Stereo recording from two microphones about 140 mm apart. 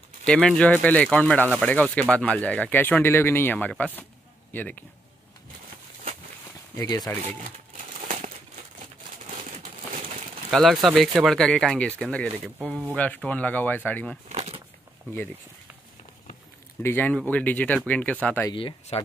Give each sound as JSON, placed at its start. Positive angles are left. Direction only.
{"t": 0.3, "sound": "speech", "side_deg": 5}
{"t": 6.8, "sound": "speech", "side_deg": 25}
{"t": 10.5, "sound": "speech", "side_deg": 0}
{"t": 14.3, "sound": "a sound", "side_deg": -45}
{"t": 16.8, "sound": "speech", "side_deg": 15}
{"t": 18.5, "sound": "speech", "side_deg": 35}